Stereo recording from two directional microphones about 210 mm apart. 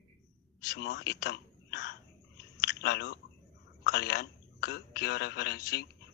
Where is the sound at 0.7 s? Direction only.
55° left (ahead or behind).